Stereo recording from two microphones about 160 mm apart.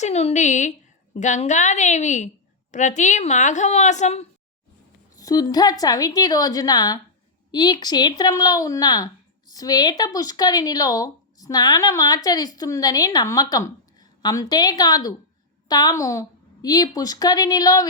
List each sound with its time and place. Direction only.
0.0 s a woman's voice: 40° left (ahead or behind)
5.1 s speech: 20° left (ahead or behind)